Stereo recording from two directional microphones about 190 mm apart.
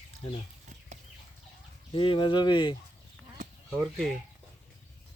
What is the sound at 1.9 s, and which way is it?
Speech, 25° left (ahead or behind).